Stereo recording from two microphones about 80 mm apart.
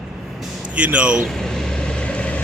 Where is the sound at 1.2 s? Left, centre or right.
Centre.